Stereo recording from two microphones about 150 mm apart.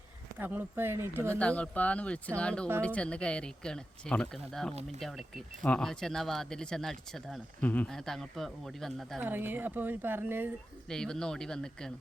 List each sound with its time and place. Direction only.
0.3 s speech: 15° right (ahead or behind)
1.4 s speech: 10° left (ahead or behind)
4.7 s speech: 45° right (ahead or behind)
4.9 s speech: centre (ahead or behind)
9.2 s speech: 15° right (ahead or behind)
10.8 s speech: 5° left (ahead or behind)